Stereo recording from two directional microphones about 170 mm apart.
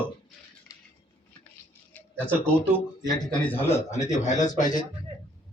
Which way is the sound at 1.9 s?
10° left (ahead or behind).